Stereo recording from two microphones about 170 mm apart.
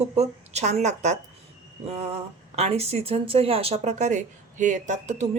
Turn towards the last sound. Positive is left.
turn(degrees=-40)  # may be behind; listen again after turning